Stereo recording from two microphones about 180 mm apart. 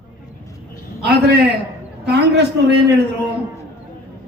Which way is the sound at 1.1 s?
70° right (ahead or behind).